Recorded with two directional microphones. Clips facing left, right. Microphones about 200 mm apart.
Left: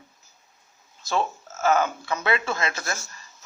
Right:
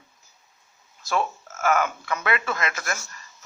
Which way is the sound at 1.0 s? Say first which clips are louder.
Even; 25° left (ahead or behind).